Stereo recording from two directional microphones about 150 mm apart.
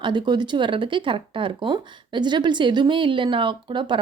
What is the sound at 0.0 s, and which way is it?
Speech, 30° right (ahead or behind).